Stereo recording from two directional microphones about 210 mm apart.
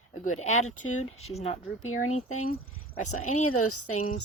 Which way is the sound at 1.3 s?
30° left (ahead or behind).